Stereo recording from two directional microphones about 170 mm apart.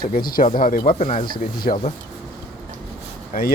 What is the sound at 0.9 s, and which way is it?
Speech, 45° left (ahead or behind).